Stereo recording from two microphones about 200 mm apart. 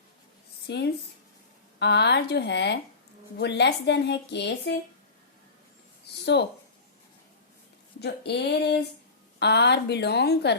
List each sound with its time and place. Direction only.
0.7 s a woman's voice: 60° left (ahead or behind)
6.3 s a woman's voice: 60° left (ahead or behind)
8.0 s a woman's voice: 55° left (ahead or behind)